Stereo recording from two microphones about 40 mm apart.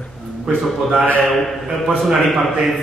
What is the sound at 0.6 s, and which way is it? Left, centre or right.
Speech, centre.